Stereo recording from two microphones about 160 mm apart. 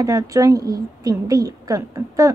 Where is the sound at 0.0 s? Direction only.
20° right (ahead or behind).